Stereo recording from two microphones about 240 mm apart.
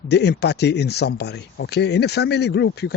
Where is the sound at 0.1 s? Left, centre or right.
Left.